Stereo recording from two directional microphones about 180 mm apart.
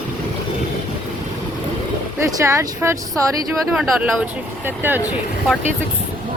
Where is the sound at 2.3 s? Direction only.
15° right (ahead or behind).